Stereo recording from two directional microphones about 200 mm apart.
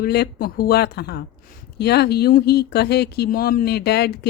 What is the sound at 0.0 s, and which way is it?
Speech, 50° left (ahead or behind).